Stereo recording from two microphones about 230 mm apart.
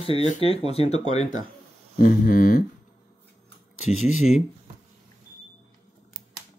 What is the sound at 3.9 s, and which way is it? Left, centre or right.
Speech, left.